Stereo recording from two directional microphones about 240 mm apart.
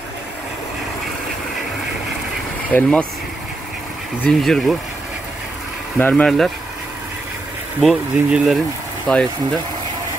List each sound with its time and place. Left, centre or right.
2.7 s speech: centre
4.2 s speech: centre
5.9 s speech: centre
7.8 s speech: centre